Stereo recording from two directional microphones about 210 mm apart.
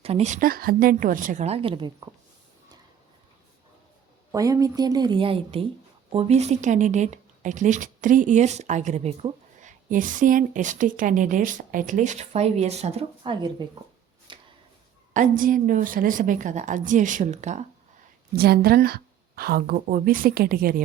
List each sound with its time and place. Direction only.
0.0 s speech: 30° right (ahead or behind)
4.3 s speech: 15° right (ahead or behind)
14.3 s a sound: 25° right (ahead or behind)
15.1 s speech: 40° right (ahead or behind)
18.3 s a woman's voice: 50° right (ahead or behind)